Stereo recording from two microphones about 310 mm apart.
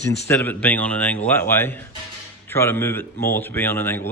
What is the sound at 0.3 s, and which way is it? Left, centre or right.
A man's voice, centre.